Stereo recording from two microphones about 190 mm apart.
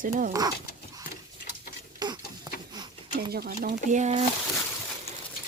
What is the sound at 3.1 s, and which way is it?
Speech, 55° right (ahead or behind).